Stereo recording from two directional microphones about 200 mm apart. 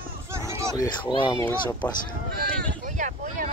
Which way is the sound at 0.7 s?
20° left (ahead or behind).